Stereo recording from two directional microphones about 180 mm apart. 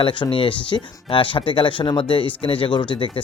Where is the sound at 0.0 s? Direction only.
30° left (ahead or behind).